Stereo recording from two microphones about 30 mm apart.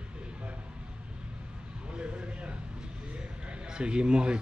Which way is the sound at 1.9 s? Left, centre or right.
Right.